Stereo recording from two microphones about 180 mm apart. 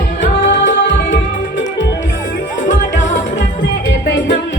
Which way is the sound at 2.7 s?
45° left (ahead or behind).